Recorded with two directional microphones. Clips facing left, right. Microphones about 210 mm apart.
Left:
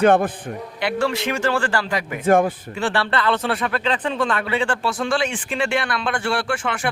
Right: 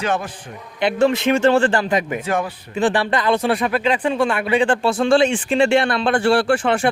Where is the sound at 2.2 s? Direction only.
50° left (ahead or behind).